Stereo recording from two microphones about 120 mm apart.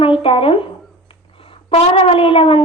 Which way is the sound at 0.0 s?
50° left (ahead or behind).